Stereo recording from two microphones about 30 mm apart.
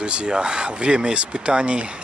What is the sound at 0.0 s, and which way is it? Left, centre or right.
Speech, right.